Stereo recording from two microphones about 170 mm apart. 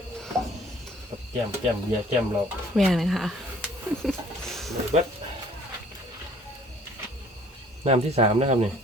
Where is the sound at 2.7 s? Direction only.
Centre (ahead or behind).